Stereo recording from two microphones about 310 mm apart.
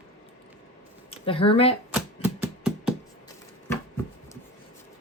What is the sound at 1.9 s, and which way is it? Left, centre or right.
Typewriter, centre.